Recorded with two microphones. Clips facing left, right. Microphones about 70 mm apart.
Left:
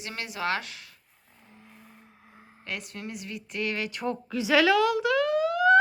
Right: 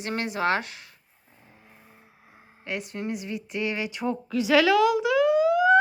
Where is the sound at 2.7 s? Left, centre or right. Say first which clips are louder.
Right 6 dB; right.